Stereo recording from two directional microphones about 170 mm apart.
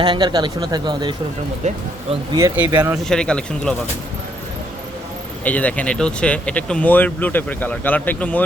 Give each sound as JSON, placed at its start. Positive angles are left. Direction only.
{"t": 0.0, "sound": "speech", "side_deg": -25}
{"t": 1.6, "sound": "speech", "side_deg": -45}
{"t": 2.6, "sound": "speech", "side_deg": -10}
{"t": 2.9, "sound": "speech", "side_deg": 5}
{"t": 5.5, "sound": "speech", "side_deg": 10}